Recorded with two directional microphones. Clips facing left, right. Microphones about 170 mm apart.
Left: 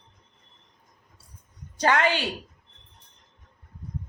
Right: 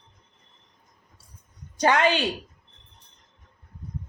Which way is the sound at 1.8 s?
15° right (ahead or behind).